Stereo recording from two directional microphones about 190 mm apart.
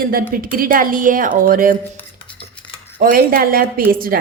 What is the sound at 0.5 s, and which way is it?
A woman's voice, 50° right (ahead or behind).